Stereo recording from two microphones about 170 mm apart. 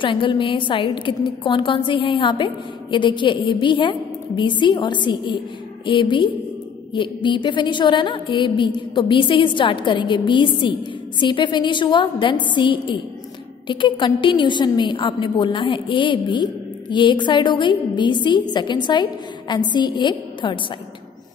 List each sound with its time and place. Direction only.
0.0 s a woman's voice: 30° left (ahead or behind)